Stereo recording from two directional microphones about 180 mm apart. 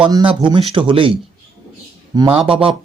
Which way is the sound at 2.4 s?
30° right (ahead or behind).